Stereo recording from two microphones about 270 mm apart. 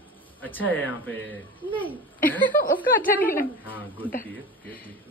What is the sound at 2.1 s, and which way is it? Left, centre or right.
Speech, left.